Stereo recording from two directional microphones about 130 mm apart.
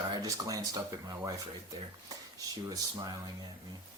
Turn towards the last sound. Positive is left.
turn(degrees=-30)  # may be behind; listen again after turning